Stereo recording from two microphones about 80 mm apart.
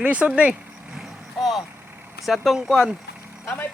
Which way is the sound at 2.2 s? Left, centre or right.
Centre.